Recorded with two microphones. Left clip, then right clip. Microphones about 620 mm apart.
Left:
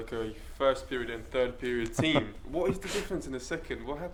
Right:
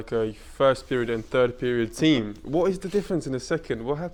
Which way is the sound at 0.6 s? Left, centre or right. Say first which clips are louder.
Right 7 dB; right.